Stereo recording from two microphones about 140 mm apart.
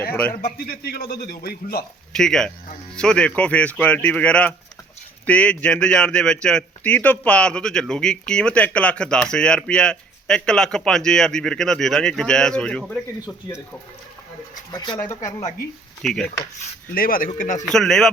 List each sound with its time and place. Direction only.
0.1 s speech: 10° left (ahead or behind)
0.9 s speech: 90° left
2.1 s a man's voice: 5° left (ahead or behind)
14.7 s speech: 30° left (ahead or behind)
16.0 s speech: 5° left (ahead or behind)
16.9 s speech: 90° left; by 17.7 s 70° left (ahead or behind)
17.7 s a man's voice: 5° left (ahead or behind)